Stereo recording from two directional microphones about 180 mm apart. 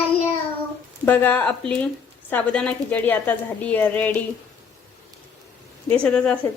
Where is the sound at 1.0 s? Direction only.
10° left (ahead or behind).